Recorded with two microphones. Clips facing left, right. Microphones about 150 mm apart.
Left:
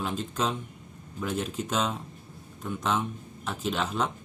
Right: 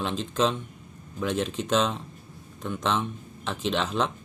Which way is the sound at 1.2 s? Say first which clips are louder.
Right 4 dB; 85° right.